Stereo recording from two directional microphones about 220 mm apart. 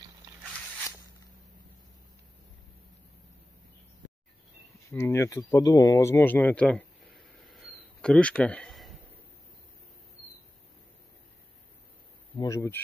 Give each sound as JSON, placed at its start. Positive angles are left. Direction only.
{"t": 4.8, "sound": "speech", "side_deg": 10}
{"t": 12.4, "sound": "speech", "side_deg": 15}